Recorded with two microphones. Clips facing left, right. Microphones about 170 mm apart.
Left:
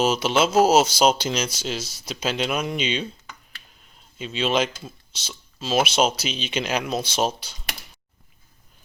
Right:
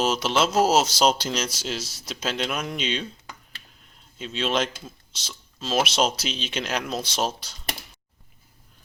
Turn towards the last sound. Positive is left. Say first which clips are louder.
# left 3 dB
turn(degrees=0)  # may be behind; listen again after turning